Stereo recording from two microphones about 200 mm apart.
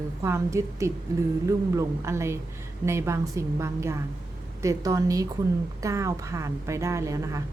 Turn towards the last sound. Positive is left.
turn(degrees=-15)  # may be behind; listen again after turning